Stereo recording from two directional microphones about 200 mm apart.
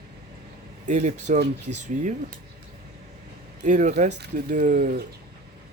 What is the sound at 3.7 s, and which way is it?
Speech, 35° right (ahead or behind).